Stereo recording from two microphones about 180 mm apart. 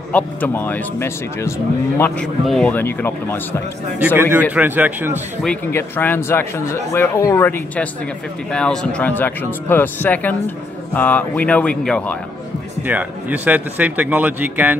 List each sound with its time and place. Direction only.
0.1 s speech: 10° left (ahead or behind)
4.0 s speech: 10° right (ahead or behind)
5.7 s speech: 10° left (ahead or behind)
12.8 s speech: 10° right (ahead or behind)